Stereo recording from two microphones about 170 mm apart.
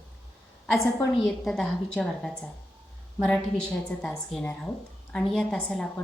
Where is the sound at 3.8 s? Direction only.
10° left (ahead or behind).